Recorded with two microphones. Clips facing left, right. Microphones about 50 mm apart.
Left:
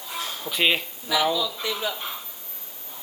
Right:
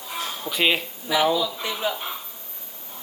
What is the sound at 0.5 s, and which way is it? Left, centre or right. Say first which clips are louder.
Speech: right 1 dB; centre.